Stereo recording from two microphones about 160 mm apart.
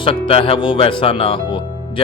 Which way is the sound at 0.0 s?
35° left (ahead or behind).